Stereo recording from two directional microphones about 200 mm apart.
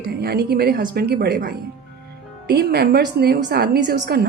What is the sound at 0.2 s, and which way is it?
A woman's voice, 50° right (ahead or behind).